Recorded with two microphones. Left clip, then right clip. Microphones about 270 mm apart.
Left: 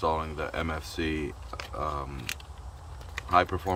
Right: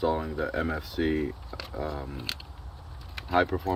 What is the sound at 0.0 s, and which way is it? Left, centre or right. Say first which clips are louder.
Speech: right 1 dB; centre.